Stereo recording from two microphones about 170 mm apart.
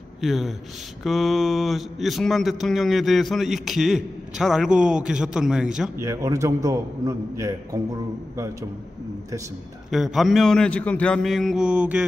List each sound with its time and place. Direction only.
0.2 s speech: centre (ahead or behind)
5.9 s a man's voice: 15° right (ahead or behind)
9.8 s speech: centre (ahead or behind)